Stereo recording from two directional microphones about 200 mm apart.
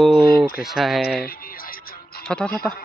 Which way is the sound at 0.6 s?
Centre (ahead or behind).